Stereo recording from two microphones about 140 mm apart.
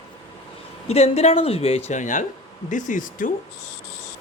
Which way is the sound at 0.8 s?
50° left (ahead or behind).